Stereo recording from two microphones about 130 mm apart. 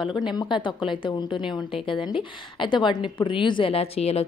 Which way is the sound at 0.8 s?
40° left (ahead or behind).